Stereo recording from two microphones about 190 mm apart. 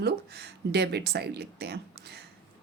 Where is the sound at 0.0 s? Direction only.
60° right (ahead or behind).